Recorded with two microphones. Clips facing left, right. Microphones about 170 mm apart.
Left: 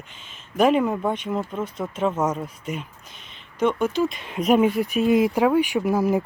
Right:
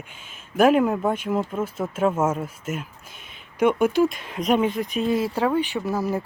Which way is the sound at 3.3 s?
10° right (ahead or behind).